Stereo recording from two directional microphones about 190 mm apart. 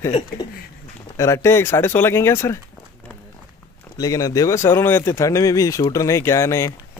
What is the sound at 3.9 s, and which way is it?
Speech, 20° left (ahead or behind).